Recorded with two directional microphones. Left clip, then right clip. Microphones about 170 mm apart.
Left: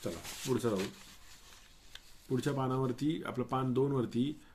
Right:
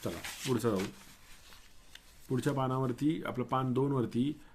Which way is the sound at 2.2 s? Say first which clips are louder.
Right 1 dB; 25° right (ahead or behind).